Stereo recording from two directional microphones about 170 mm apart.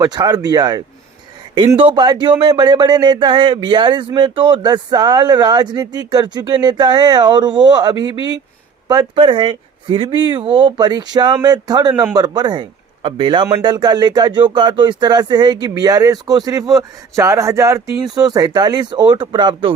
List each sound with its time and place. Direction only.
0.0 s a man's voice: 25° right (ahead or behind)